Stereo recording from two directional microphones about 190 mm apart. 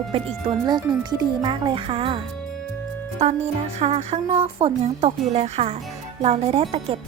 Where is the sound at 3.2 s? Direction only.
35° right (ahead or behind).